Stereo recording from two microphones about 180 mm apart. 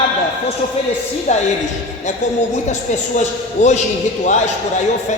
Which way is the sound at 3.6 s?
40° left (ahead or behind).